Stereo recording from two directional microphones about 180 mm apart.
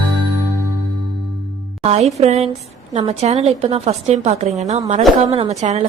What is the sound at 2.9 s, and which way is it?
A woman's voice, 40° right (ahead or behind).